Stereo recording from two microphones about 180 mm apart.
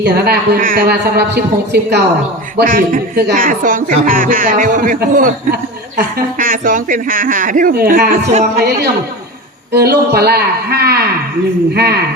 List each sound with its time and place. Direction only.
0.0 s a woman's voice: 60° right (ahead or behind)
2.6 s speech: 50° right (ahead or behind)
9.7 s a woman's voice: 60° right (ahead or behind)